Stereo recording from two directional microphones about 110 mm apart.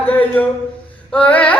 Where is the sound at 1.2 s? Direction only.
10° left (ahead or behind).